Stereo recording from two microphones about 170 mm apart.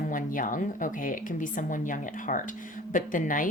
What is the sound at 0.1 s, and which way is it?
A woman's voice, 50° left (ahead or behind).